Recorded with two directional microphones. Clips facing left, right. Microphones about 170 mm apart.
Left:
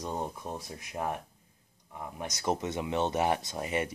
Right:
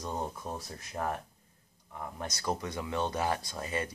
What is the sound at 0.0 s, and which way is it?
Speech, 15° left (ahead or behind).